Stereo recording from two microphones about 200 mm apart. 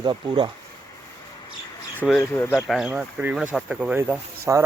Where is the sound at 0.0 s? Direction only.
20° right (ahead or behind).